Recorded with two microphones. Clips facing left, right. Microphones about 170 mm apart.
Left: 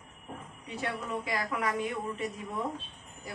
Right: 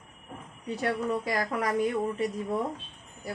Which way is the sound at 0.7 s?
40° right (ahead or behind).